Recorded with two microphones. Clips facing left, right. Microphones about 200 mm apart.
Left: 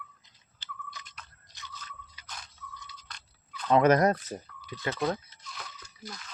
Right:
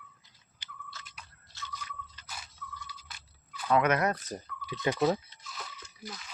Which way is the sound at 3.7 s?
30° left (ahead or behind).